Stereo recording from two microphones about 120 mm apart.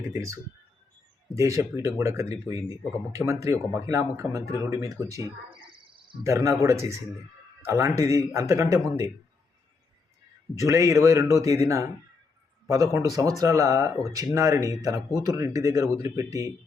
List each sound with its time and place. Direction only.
0.1 s speech: 25° right (ahead or behind)
1.4 s speech: 25° right (ahead or behind)
5.5 s bird: 45° right (ahead or behind)
6.2 s speech: 25° right (ahead or behind)
10.5 s speech: 25° right (ahead or behind)